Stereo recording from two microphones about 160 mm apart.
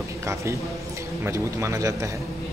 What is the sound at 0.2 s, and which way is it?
A man's voice, 15° right (ahead or behind).